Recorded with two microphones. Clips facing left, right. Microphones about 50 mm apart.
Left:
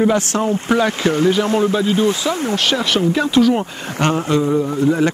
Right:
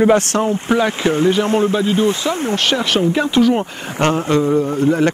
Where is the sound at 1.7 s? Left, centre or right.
Centre.